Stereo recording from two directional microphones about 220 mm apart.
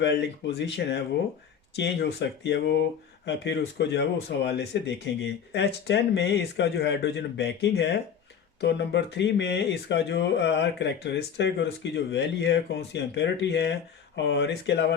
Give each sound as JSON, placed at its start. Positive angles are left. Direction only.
{"t": 0.0, "sound": "speech", "side_deg": 50}